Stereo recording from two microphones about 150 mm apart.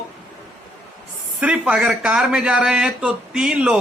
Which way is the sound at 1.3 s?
5° right (ahead or behind).